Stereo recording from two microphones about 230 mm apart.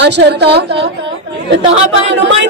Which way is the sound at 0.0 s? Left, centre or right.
Right.